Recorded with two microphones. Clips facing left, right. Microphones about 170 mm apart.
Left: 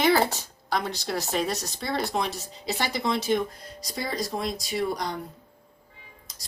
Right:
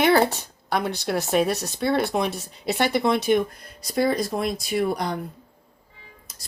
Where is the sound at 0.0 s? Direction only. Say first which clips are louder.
Right 3 dB; 60° right (ahead or behind).